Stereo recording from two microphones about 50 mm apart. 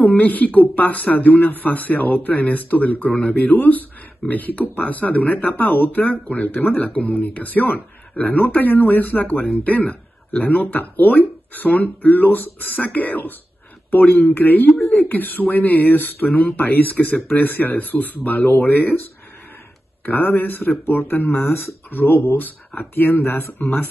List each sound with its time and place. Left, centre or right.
0.0 s speech: left
20.1 s speech: left